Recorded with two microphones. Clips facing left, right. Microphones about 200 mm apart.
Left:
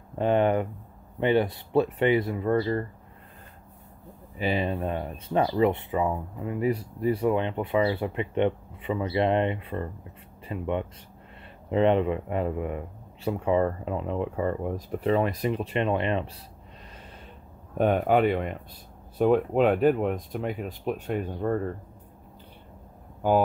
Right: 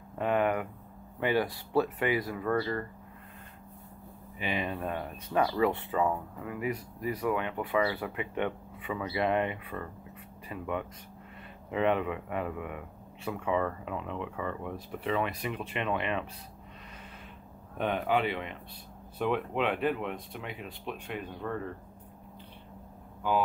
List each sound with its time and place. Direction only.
0.2 s speech: 30° left (ahead or behind)
4.4 s speech: 35° left (ahead or behind)
17.7 s speech: 45° left (ahead or behind)
23.2 s speech: 45° left (ahead or behind)